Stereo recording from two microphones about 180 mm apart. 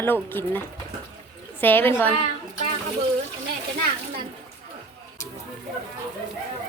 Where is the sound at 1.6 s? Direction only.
10° left (ahead or behind).